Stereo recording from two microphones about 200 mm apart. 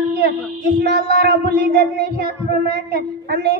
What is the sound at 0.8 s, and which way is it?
A woman's voice, 55° right (ahead or behind).